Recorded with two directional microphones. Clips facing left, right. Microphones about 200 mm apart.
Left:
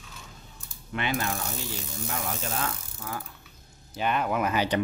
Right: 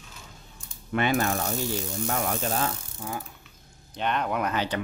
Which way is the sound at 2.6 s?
25° right (ahead or behind).